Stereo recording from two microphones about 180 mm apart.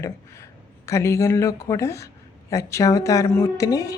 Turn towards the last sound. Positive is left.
turn(degrees=20)  # may be behind; listen again after turning